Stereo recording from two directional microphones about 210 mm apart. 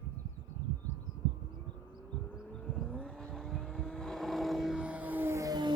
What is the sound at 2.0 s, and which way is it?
Vehicle, 5° right (ahead or behind).